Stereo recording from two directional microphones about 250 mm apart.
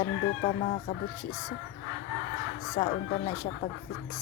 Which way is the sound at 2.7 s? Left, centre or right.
Left.